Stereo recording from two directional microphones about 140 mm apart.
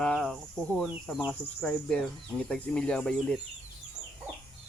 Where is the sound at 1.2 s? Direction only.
5° left (ahead or behind).